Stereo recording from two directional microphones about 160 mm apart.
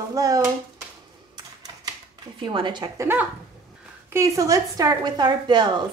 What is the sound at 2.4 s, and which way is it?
Speech, 30° right (ahead or behind).